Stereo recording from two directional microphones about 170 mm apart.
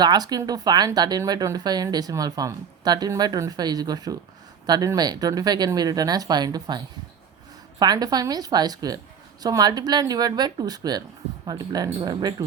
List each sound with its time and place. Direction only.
0.0 s speech: 25° right (ahead or behind)